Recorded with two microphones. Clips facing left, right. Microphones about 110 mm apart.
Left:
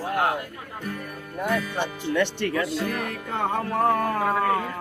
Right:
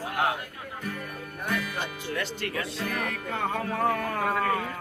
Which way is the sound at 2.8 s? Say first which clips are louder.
Left 2 dB; 35° left (ahead or behind).